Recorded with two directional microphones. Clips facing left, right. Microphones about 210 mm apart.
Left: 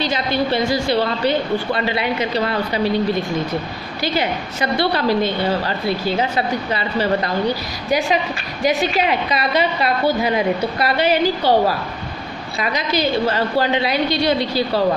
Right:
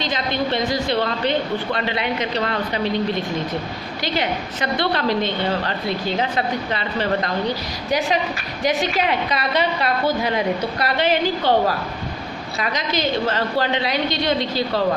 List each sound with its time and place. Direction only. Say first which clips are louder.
0.0 s a woman's voice: left 3 dB; 10° left (ahead or behind)